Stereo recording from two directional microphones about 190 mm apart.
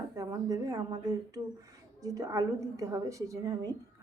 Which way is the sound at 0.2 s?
20° right (ahead or behind).